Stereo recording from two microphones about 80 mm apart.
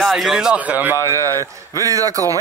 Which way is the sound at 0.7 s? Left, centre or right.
Right.